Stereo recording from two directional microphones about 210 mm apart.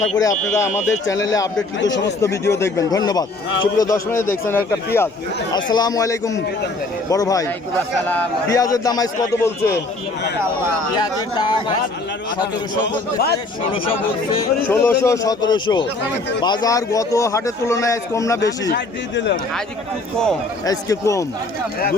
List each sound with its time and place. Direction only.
0.2 s a man's voice: 15° left (ahead or behind)
1.8 s speech: 60° left (ahead or behind)
2.0 s a man's voice: 15° left (ahead or behind)
10.9 s speech: 20° left (ahead or behind)
14.7 s a man's voice: 10° left (ahead or behind)
18.7 s speech: 55° left (ahead or behind)
20.7 s a man's voice: 15° left (ahead or behind)